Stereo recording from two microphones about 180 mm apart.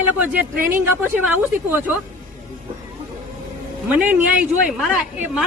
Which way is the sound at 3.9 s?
10° right (ahead or behind).